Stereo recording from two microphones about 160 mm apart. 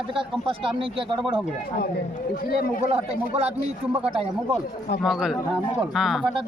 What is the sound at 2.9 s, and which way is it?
Speech, 40° right (ahead or behind).